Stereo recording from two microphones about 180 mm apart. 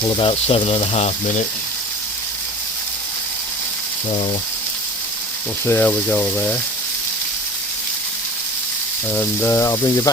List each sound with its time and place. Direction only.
0.0 s speech: 30° left (ahead or behind)
5.6 s speech: 10° left (ahead or behind)
9.0 s speech: 10° left (ahead or behind)